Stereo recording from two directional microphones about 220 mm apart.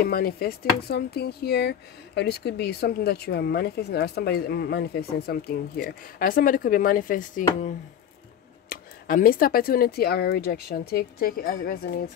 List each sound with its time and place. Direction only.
0.0 s speech: 45° left (ahead or behind)
8.6 s speech: 40° left (ahead or behind)